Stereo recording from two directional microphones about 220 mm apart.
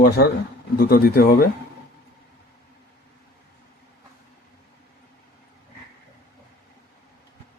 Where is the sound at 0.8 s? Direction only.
45° left (ahead or behind).